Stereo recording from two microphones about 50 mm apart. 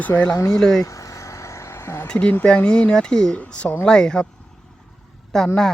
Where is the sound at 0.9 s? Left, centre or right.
Left.